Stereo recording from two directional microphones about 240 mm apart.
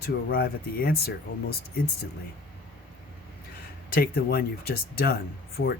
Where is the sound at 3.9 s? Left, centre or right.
Left.